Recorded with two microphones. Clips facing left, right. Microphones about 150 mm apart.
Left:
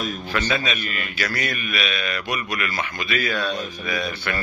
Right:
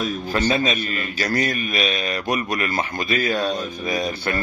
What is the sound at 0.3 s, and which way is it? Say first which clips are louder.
A man's voice: right 4 dB; 40° right (ahead or behind).